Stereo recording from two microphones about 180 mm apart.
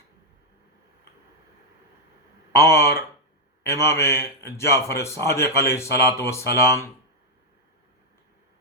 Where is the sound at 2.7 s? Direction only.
60° left (ahead or behind).